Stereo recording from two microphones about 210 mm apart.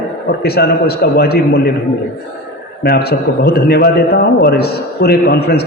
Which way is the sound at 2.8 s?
50° left (ahead or behind).